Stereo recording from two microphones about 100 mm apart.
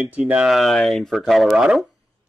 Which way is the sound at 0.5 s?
5° left (ahead or behind).